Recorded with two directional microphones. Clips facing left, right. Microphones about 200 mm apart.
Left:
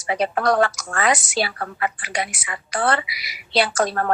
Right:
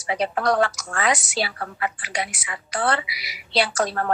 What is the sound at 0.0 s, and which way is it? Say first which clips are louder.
A woman's voice: left 2 dB; 50° left (ahead or behind).